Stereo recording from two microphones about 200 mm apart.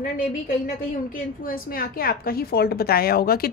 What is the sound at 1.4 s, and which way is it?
Speech, 45° left (ahead or behind).